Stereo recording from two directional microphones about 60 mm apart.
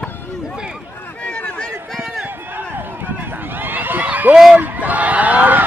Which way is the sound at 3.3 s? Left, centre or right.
Right.